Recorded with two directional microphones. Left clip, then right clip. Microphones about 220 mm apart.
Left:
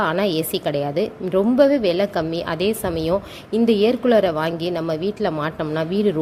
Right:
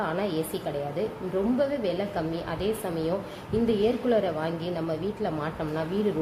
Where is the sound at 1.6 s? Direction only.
40° left (ahead or behind).